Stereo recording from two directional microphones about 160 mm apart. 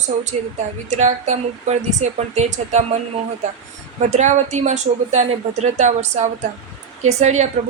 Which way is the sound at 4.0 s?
45° right (ahead or behind).